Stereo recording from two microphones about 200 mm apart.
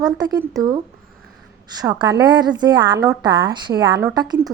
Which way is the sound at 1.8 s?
20° right (ahead or behind).